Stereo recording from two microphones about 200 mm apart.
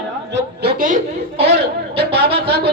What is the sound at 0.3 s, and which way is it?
Speech, 50° right (ahead or behind).